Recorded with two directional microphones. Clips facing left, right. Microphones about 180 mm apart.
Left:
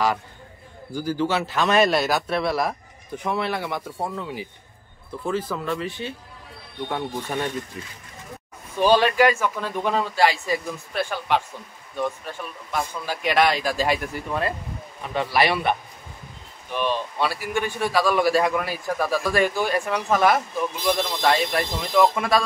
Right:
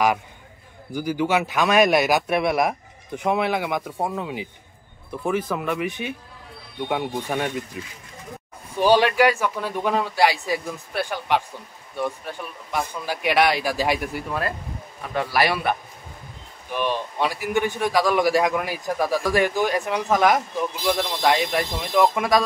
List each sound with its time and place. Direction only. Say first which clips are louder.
0.9 s a man's voice: right 2 dB; 15° right (ahead or behind)
8.8 s a man's voice: even; 15° right (ahead or behind)
16.7 s a man's voice: even; 15° right (ahead or behind)